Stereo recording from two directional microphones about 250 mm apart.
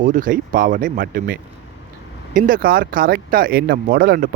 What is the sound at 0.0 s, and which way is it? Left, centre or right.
Speech, right.